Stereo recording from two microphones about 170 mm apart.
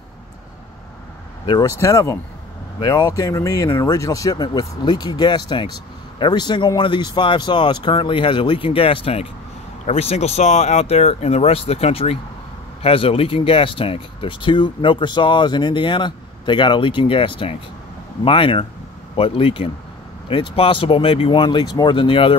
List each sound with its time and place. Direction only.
1.4 s speech: 25° left (ahead or behind)